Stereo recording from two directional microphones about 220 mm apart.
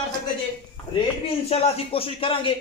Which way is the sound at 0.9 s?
25° left (ahead or behind).